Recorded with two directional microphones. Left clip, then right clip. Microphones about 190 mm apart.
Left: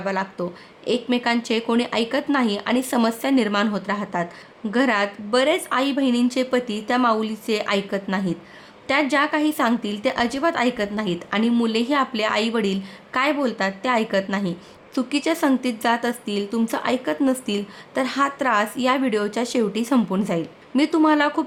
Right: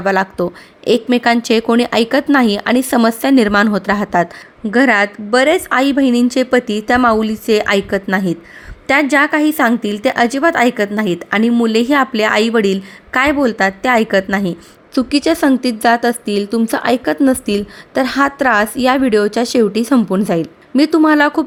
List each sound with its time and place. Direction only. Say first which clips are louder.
0.0 s a woman's voice: right 10 dB; 35° right (ahead or behind)